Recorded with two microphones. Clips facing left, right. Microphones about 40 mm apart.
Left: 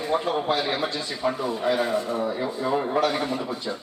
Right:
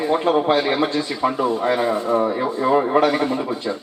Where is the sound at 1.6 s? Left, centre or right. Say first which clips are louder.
Right 1 dB; right.